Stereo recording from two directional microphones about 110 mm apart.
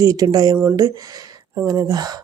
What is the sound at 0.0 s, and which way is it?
Speech, 35° right (ahead or behind).